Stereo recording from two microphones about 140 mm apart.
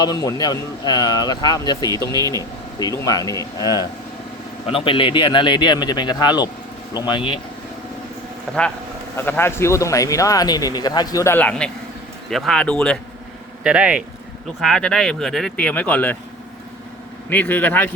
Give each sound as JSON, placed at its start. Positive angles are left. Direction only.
{"t": 0.0, "sound": "speech", "side_deg": 30}
{"t": 4.6, "sound": "a man's voice", "side_deg": 40}
{"t": 8.5, "sound": "speech", "side_deg": 5}
{"t": 9.1, "sound": "speech", "side_deg": 15}
{"t": 13.7, "sound": "speech", "side_deg": -10}
{"t": 14.6, "sound": "speech", "side_deg": 5}
{"t": 17.2, "sound": "speech", "side_deg": 10}